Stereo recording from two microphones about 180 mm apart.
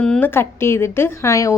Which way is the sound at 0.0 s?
10° left (ahead or behind).